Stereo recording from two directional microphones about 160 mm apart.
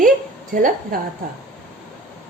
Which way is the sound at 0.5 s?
60° right (ahead or behind).